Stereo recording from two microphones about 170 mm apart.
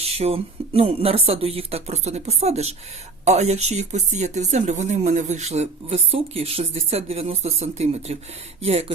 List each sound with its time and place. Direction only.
0.0 s speech: 35° right (ahead or behind)